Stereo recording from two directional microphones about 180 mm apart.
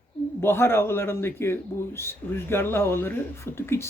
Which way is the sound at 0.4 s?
15° left (ahead or behind).